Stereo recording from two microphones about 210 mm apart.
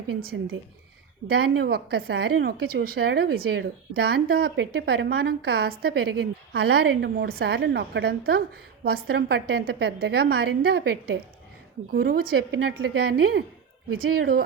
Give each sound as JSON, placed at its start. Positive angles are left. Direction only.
{"t": 0.2, "sound": "a woman's voice", "side_deg": -45}